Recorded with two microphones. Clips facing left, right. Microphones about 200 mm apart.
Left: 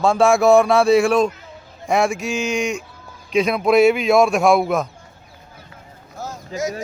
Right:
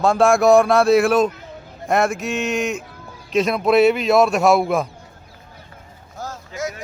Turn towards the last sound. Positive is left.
turn(degrees=20)  # may be behind; listen again after turning